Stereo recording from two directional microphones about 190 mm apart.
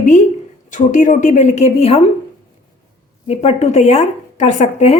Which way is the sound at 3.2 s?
30° left (ahead or behind).